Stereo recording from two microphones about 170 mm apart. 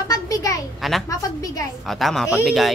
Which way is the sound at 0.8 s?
Centre (ahead or behind).